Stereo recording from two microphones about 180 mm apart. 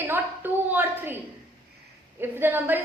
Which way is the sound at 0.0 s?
10° right (ahead or behind).